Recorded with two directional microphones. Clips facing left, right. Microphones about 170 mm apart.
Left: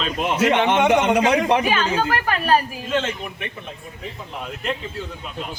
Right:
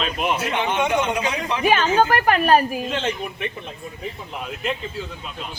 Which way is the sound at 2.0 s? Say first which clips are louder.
Right 4 dB; 50° right (ahead or behind).